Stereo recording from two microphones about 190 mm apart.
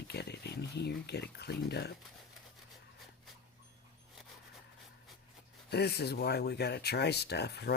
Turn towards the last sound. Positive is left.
turn(degrees=60)  # may be behind; listen again after turning